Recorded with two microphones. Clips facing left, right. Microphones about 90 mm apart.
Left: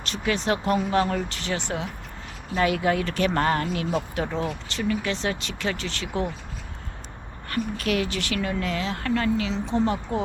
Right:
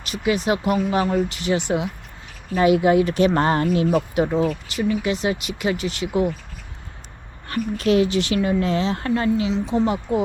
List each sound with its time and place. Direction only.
0.0 s speech: 10° right (ahead or behind)
7.5 s speech: 25° right (ahead or behind)